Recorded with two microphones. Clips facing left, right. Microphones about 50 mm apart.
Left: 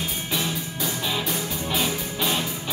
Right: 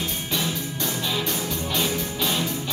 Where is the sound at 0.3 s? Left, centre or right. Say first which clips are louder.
Even; centre.